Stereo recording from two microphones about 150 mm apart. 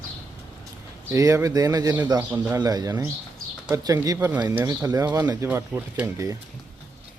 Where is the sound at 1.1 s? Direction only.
20° right (ahead or behind).